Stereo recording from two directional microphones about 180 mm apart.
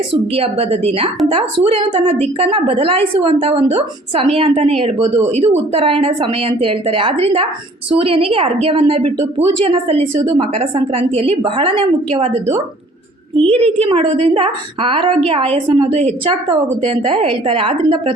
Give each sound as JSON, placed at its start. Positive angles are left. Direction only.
{"t": 0.3, "sound": "a woman's voice", "side_deg": -35}
{"t": 10.2, "sound": "a woman's voice", "side_deg": -20}
{"t": 10.5, "sound": "a woman's voice", "side_deg": -30}